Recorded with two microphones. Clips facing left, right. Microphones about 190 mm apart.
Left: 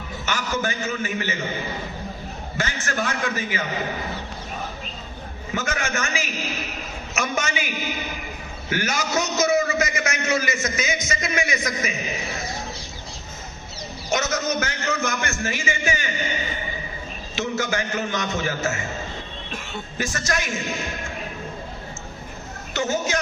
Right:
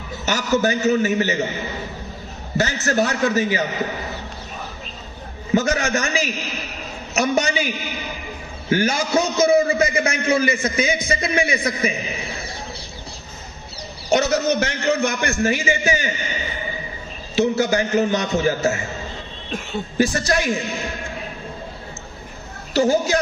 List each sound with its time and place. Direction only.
0.3 s a man's voice: 40° right (ahead or behind)
2.8 s a man's voice: 40° right (ahead or behind)
5.5 s a man's voice: 35° right (ahead or behind)
8.7 s a man's voice: 30° right (ahead or behind)
14.1 s a man's voice: 35° right (ahead or behind)
17.3 s a man's voice: 35° right (ahead or behind)
20.0 s a man's voice: 35° right (ahead or behind)
22.7 s a man's voice: 35° right (ahead or behind)